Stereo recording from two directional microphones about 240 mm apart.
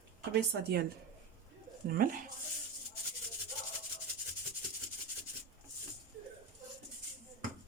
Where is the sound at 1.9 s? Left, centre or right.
Right.